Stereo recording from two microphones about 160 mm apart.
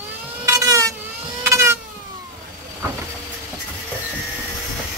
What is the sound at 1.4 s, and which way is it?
Vehicle, 15° right (ahead or behind).